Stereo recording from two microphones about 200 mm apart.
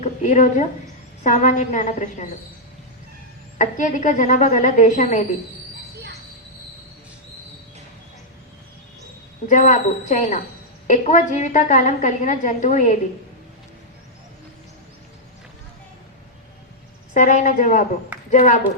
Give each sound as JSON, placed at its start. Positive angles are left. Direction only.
{"t": 0.0, "sound": "a sound", "side_deg": 40}
{"t": 1.2, "sound": "a woman's voice", "side_deg": 35}
{"t": 3.6, "sound": "a woman's voice", "side_deg": 40}
{"t": 9.5, "sound": "a woman's voice", "side_deg": 40}
{"t": 17.2, "sound": "a woman's voice", "side_deg": 40}